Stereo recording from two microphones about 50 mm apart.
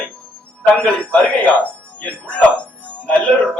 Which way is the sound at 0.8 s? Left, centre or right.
Left.